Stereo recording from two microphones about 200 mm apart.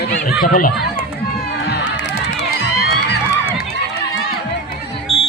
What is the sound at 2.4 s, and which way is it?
Run, 55° left (ahead or behind).